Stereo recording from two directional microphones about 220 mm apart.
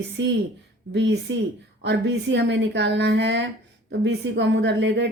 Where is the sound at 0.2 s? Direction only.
55° right (ahead or behind).